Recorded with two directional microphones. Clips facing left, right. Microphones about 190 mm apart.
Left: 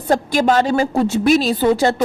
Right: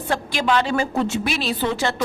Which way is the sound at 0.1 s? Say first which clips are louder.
Left 6 dB; 45° left (ahead or behind).